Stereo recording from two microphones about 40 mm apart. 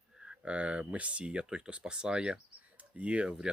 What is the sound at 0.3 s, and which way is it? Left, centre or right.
Speech, right.